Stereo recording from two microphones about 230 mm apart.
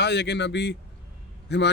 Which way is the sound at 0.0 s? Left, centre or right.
Left.